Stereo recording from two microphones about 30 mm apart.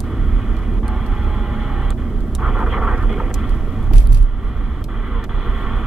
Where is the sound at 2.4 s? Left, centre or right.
Centre.